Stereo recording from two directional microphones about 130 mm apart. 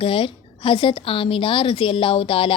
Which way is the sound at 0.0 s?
45° left (ahead or behind).